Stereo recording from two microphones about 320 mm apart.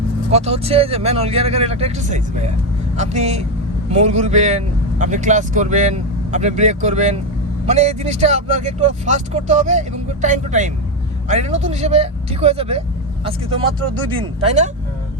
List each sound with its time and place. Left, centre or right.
0.3 s speech: centre
14.2 s speech: centre